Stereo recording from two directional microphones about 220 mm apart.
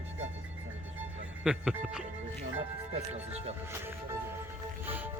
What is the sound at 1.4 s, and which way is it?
Speech, 5° right (ahead or behind).